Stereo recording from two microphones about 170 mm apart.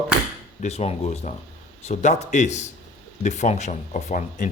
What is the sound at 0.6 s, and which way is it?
Speech, 40° left (ahead or behind).